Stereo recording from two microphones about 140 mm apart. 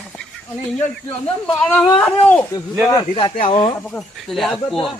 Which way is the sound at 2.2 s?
10° left (ahead or behind).